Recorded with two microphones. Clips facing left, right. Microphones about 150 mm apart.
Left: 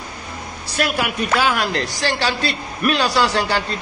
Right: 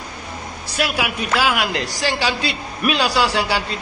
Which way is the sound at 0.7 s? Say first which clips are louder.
Left 1 dB; 5° right (ahead or behind).